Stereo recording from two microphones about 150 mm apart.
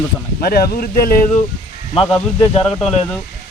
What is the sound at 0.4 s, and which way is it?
Speech, 85° left.